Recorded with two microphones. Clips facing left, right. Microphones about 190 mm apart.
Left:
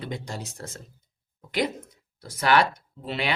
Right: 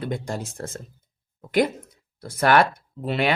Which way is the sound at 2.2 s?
50° right (ahead or behind).